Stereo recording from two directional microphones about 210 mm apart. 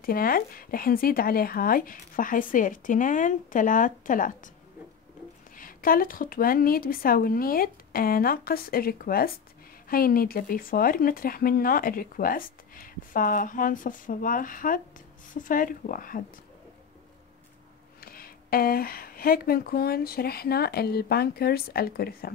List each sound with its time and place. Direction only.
0.0 s speech: 45° left (ahead or behind)
5.6 s speech: 40° left (ahead or behind)
18.0 s speech: 45° left (ahead or behind)